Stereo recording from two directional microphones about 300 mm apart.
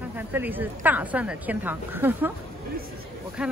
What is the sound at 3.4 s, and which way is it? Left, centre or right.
Speech, centre.